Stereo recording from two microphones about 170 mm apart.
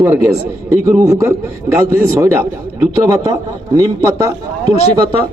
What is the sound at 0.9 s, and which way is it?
Speech, 15° right (ahead or behind).